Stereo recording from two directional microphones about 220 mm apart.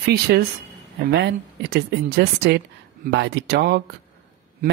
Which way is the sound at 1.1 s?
50° right (ahead or behind).